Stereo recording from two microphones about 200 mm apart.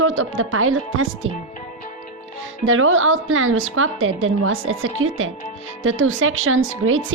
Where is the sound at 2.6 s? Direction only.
85° right.